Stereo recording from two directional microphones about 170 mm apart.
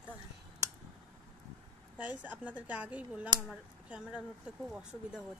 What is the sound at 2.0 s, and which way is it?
Speech, 10° right (ahead or behind).